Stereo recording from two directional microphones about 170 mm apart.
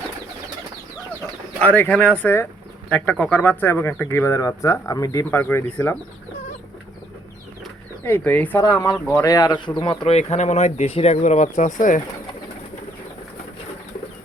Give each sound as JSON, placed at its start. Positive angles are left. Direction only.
{"t": 1.6, "sound": "speech", "side_deg": 10}
{"t": 8.0, "sound": "speech", "side_deg": 10}